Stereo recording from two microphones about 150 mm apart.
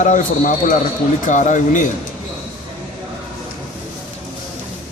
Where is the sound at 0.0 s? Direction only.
60° left (ahead or behind).